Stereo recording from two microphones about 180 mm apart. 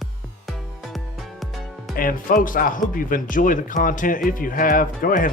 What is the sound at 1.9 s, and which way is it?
Speech, 50° left (ahead or behind).